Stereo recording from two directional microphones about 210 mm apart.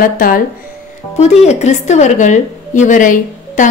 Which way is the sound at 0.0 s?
45° left (ahead or behind).